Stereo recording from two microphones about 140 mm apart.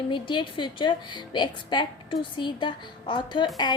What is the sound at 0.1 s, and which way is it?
A woman's voice, 35° left (ahead or behind).